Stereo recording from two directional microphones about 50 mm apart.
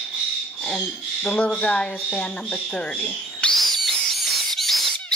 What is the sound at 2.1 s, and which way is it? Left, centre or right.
Speech, centre.